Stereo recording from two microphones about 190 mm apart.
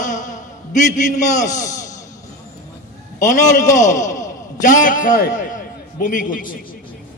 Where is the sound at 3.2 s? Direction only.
40° left (ahead or behind).